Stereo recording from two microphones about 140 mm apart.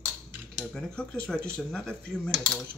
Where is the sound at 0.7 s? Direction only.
5° left (ahead or behind).